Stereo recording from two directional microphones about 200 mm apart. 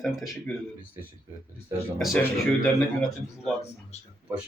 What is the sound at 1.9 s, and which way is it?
Speech, 5° left (ahead or behind).